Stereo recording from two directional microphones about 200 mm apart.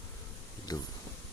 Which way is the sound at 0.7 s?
20° left (ahead or behind).